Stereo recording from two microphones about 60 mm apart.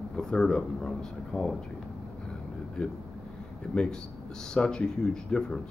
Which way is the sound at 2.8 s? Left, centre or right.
Centre.